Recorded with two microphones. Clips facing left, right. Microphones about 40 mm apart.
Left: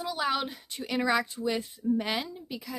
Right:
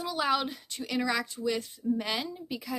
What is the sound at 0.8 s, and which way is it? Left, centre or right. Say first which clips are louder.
Speech: left 3 dB; centre.